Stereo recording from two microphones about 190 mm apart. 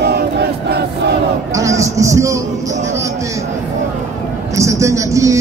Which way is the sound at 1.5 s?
15° right (ahead or behind).